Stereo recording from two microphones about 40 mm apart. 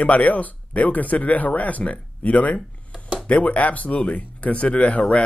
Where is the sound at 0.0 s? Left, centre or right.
Left.